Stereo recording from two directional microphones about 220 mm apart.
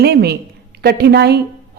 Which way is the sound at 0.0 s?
45° right (ahead or behind).